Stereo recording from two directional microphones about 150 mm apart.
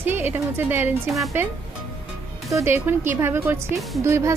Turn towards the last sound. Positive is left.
turn(degrees=-15)  # may be behind; listen again after turning